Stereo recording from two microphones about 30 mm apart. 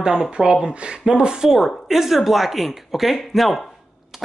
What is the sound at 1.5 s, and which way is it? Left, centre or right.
Speech, centre.